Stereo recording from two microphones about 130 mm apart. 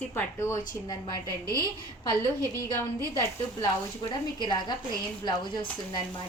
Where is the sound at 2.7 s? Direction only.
25° left (ahead or behind).